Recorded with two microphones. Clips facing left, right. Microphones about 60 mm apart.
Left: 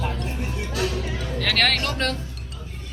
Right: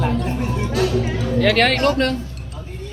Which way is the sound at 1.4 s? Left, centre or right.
Centre.